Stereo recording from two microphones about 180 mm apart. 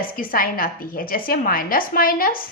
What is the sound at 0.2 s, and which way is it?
A woman's voice, 50° left (ahead or behind).